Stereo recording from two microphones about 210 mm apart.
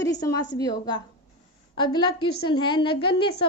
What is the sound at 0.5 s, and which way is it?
A woman's voice, 20° left (ahead or behind).